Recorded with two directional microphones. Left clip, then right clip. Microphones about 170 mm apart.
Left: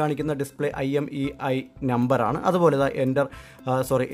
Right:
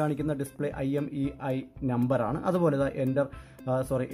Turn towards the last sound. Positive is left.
turn(degrees=30)  # may be behind; listen again after turning